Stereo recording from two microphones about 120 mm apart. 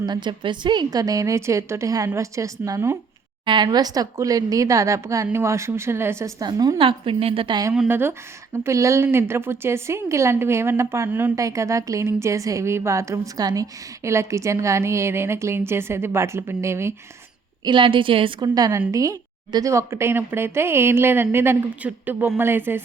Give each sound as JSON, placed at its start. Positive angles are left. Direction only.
{"t": 0.0, "sound": "a woman's voice", "side_deg": -40}
{"t": 3.4, "sound": "a woman's voice", "side_deg": -40}
{"t": 6.4, "sound": "a woman's voice", "side_deg": -35}
{"t": 6.7, "sound": "a woman's voice", "side_deg": -45}
{"t": 7.9, "sound": "a woman's voice", "side_deg": -20}
{"t": 17.7, "sound": "a woman's voice", "side_deg": -45}